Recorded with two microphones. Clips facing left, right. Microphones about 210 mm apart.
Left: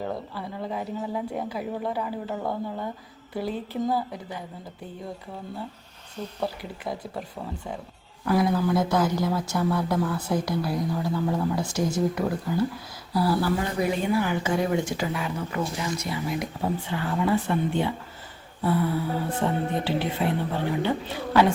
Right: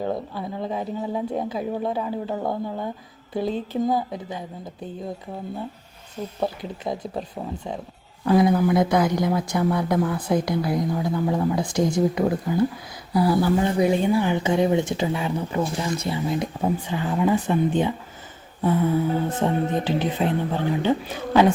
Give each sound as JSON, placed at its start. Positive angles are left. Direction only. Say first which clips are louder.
{"t": 0.0, "sound": "speech", "louder": "right 5 dB", "side_deg": -20}
{"t": 6.4, "sound": "speech", "louder": "right 4 dB", "side_deg": -20}